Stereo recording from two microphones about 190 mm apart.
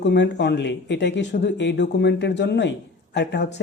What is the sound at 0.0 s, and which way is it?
Speech, 65° left (ahead or behind).